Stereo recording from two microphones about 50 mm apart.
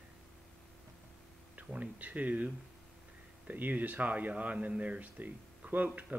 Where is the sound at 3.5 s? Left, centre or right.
Right.